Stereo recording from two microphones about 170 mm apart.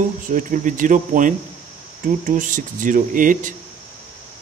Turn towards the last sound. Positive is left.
turn(degrees=-50)  # may be behind; listen again after turning